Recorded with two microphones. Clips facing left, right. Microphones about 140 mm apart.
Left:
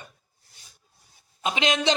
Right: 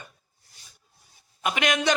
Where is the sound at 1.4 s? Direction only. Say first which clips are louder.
Even; 25° left (ahead or behind).